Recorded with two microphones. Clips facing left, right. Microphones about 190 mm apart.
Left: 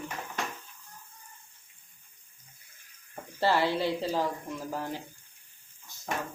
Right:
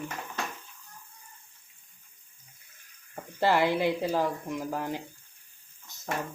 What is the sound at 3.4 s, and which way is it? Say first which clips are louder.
Speech: right 2 dB; 15° right (ahead or behind).